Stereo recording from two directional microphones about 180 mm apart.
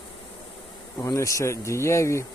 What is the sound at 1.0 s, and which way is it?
Speech, 15° left (ahead or behind).